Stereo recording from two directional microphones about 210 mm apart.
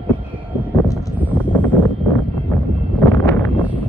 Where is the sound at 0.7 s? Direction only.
15° left (ahead or behind).